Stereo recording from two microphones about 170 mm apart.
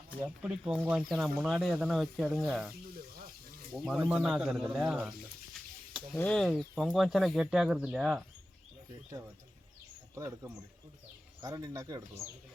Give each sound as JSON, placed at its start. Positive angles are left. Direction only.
{"t": 0.2, "sound": "speech", "side_deg": -5}
{"t": 2.9, "sound": "a sound", "side_deg": -60}
{"t": 3.8, "sound": "speech", "side_deg": -5}
{"t": 6.1, "sound": "speech", "side_deg": 5}
{"t": 10.2, "sound": "speech", "side_deg": -20}